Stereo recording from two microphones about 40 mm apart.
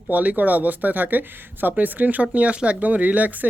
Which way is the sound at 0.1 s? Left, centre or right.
Right.